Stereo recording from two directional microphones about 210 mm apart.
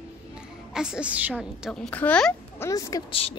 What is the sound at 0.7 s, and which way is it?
A woman's voice, 5° right (ahead or behind).